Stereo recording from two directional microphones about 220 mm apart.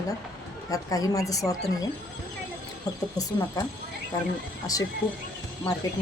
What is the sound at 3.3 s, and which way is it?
Speech, 15° left (ahead or behind).